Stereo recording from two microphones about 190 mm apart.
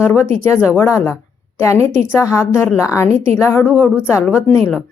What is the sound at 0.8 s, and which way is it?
Speech, 15° left (ahead or behind).